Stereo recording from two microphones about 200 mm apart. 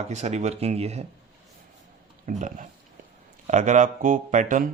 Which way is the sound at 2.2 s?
40° right (ahead or behind).